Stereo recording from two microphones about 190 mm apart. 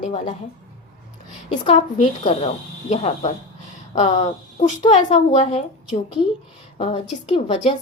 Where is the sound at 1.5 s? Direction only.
30° left (ahead or behind).